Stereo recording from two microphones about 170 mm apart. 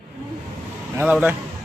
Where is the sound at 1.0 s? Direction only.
10° right (ahead or behind).